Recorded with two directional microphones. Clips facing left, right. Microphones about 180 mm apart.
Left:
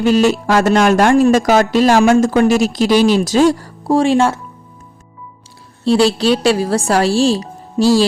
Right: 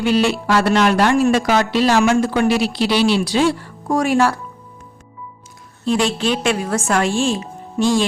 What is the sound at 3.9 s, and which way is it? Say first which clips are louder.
Speech: left 4 dB; 25° left (ahead or behind).